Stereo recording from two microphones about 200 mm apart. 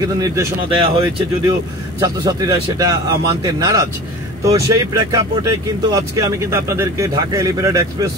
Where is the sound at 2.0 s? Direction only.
20° right (ahead or behind).